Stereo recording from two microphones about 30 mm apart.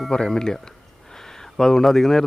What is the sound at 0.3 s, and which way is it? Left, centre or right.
Speech, centre.